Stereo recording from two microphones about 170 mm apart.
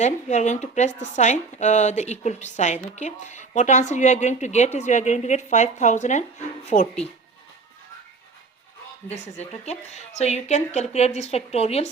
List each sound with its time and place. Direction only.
0.0 s speech: 45° left (ahead or behind)
9.0 s speech: 40° left (ahead or behind)